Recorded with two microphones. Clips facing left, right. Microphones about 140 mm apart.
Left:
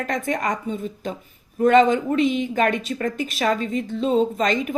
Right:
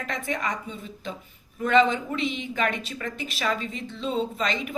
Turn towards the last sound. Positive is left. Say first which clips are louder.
# left 7 dB
turn(degrees=45)  # may be behind; listen again after turning